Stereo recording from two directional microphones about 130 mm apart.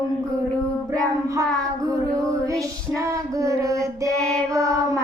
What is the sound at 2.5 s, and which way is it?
Music, 25° right (ahead or behind).